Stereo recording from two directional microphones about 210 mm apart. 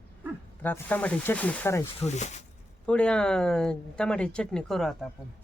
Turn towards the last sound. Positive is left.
turn(degrees=0)  # may be behind; listen again after turning